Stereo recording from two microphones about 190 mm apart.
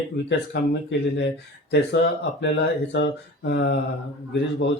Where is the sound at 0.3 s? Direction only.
65° left (ahead or behind).